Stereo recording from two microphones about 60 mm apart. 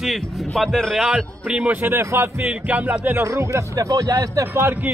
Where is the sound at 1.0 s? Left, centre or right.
Centre.